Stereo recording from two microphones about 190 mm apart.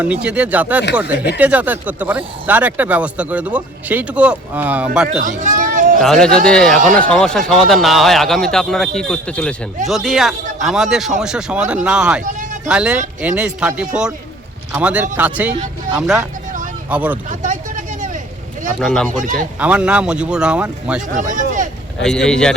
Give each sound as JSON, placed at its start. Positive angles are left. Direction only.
{"t": 0.0, "sound": "speech", "side_deg": -5}
{"t": 5.0, "sound": "a sound", "side_deg": -45}
{"t": 6.0, "sound": "speech", "side_deg": 5}
{"t": 6.7, "sound": "speech", "side_deg": -45}
{"t": 7.1, "sound": "speech", "side_deg": 5}
{"t": 12.2, "sound": "a sound", "side_deg": -40}
{"t": 12.6, "sound": "speech", "side_deg": -5}
{"t": 17.2, "sound": "vehicle", "side_deg": -40}
{"t": 18.8, "sound": "speech", "side_deg": 5}
{"t": 21.1, "sound": "speech", "side_deg": -40}
{"t": 22.0, "sound": "speech", "side_deg": 5}